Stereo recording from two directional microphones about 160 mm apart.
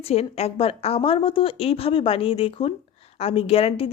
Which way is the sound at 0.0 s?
40° left (ahead or behind).